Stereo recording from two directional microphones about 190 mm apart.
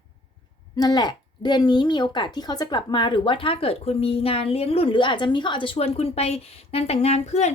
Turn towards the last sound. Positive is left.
turn(degrees=35)  # may be behind; listen again after turning